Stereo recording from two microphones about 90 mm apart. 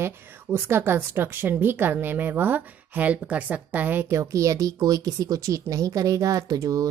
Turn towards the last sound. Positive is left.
turn(degrees=-40)  # may be behind; listen again after turning